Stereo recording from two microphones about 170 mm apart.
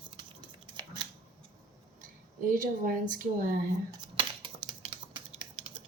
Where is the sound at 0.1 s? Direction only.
25° right (ahead or behind).